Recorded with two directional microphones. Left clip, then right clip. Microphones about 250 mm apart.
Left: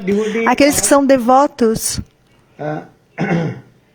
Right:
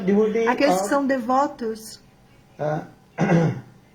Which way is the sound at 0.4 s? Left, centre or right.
Left.